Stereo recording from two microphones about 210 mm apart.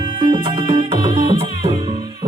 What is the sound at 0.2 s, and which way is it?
Music, 25° right (ahead or behind).